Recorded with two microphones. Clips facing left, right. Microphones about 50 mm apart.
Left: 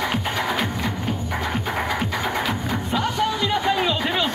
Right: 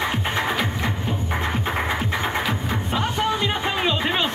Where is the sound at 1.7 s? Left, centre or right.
Right.